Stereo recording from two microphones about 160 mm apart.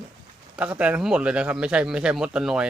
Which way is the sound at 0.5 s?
10° right (ahead or behind).